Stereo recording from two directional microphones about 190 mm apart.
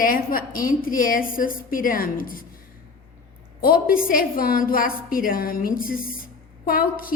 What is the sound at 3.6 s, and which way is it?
A woman's voice, 50° left (ahead or behind).